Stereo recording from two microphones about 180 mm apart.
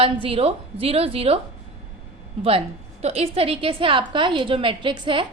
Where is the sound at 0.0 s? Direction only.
30° right (ahead or behind).